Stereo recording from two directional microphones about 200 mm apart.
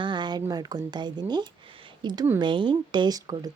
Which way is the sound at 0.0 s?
25° right (ahead or behind).